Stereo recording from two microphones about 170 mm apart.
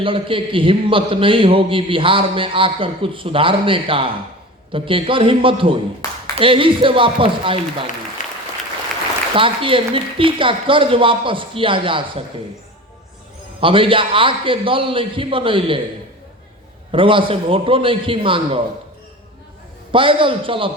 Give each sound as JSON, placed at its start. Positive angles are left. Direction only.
{"t": 0.0, "sound": "a man's voice", "side_deg": -30}
{"t": 9.3, "sound": "a man's voice", "side_deg": -30}
{"t": 13.6, "sound": "a man's voice", "side_deg": -30}
{"t": 16.9, "sound": "a man's voice", "side_deg": -30}
{"t": 19.9, "sound": "a man's voice", "side_deg": -30}